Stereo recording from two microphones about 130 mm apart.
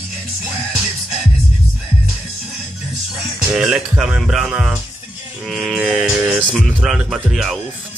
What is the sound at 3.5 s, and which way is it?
Speech, 5° right (ahead or behind).